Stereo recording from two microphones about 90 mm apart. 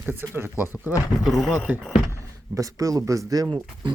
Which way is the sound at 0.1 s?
25° right (ahead or behind).